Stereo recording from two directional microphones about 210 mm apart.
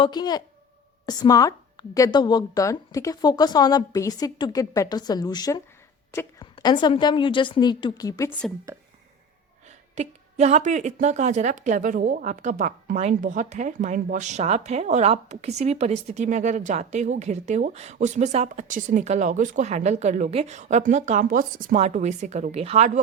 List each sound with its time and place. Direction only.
0.0 s a woman's voice: 20° left (ahead or behind)
9.9 s a woman's voice: 30° right (ahead or behind)